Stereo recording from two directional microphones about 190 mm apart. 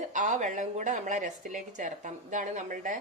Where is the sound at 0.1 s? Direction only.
40° right (ahead or behind).